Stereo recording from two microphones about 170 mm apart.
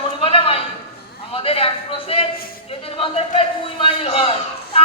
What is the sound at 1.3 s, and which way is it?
A man's voice, 35° left (ahead or behind).